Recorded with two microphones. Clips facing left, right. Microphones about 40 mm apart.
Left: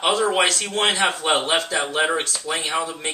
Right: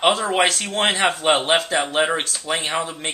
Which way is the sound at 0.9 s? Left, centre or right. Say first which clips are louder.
Right 2 dB; right.